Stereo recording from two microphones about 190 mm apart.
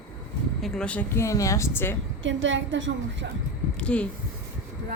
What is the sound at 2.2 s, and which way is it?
A woman's voice, 80° right.